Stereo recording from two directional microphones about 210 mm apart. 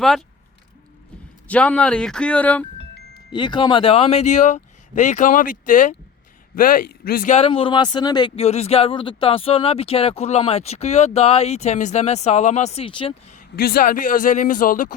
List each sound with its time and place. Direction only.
0.0 s speech: centre (ahead or behind)
1.5 s speech: 5° left (ahead or behind)
3.3 s speech: 20° left (ahead or behind); by 7.3 s 45° left (ahead or behind)
7.3 s speech: 25° left (ahead or behind)
13.4 s speech: 45° left (ahead or behind)